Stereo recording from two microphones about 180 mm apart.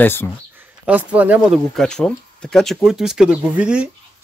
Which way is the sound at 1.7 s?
5° left (ahead or behind).